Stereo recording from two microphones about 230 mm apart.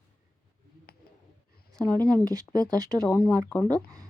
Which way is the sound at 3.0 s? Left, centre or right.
Centre.